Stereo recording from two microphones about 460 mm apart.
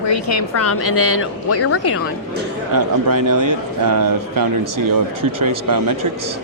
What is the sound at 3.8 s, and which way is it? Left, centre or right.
Speech, right.